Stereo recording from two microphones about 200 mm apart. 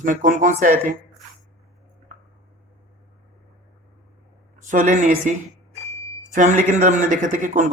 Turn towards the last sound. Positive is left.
turn(degrees=-40)  # may be behind; listen again after turning